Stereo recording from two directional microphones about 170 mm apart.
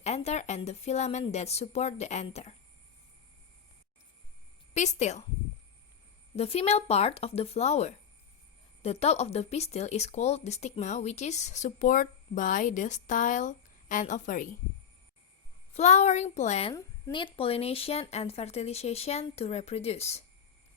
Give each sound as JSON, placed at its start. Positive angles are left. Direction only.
{"t": 0.0, "sound": "speech", "side_deg": 40}
{"t": 4.7, "sound": "speech", "side_deg": 40}
{"t": 6.3, "sound": "speech", "side_deg": 35}
{"t": 15.7, "sound": "speech", "side_deg": 40}
{"t": 16.7, "sound": "speech", "side_deg": 30}